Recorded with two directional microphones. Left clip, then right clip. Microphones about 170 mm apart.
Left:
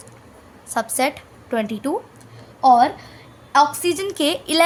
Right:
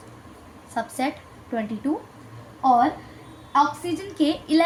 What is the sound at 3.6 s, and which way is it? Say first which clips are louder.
A woman's voice: left 5 dB; 45° left (ahead or behind).